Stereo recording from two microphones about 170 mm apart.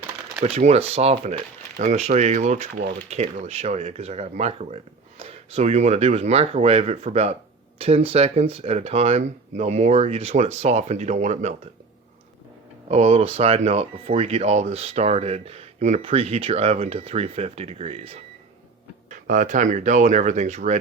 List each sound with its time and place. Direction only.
0.4 s speech: 35° right (ahead or behind)
12.9 s speech: 35° right (ahead or behind)
19.1 s speech: 50° right (ahead or behind)